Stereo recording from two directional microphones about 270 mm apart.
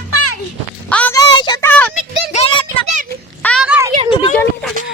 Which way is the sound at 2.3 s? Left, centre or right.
Centre.